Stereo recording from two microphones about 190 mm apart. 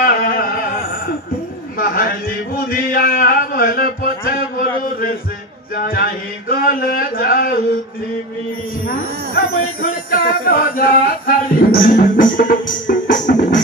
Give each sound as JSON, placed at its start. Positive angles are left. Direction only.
{"t": 0.0, "sound": "a sound", "side_deg": 50}
{"t": 5.8, "sound": "speech", "side_deg": 50}
{"t": 9.8, "sound": "music", "side_deg": 50}